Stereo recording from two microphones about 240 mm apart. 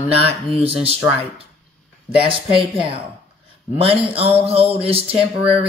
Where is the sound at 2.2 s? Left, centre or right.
Right.